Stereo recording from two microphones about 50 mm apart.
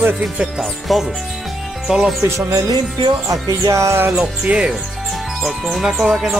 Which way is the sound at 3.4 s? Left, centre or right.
Right.